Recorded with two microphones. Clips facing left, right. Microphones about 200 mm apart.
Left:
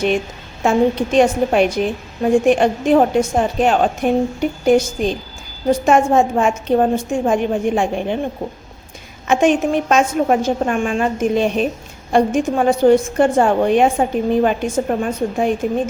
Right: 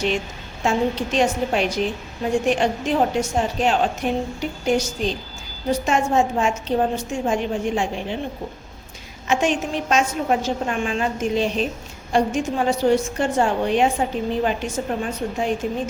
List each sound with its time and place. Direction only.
0.6 s a woman's voice: 55° left (ahead or behind)
9.2 s a woman's voice: 55° left (ahead or behind)